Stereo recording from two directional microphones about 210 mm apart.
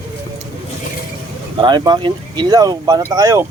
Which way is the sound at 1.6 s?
20° right (ahead or behind).